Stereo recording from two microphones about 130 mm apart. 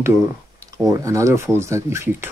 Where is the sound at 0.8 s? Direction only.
25° right (ahead or behind).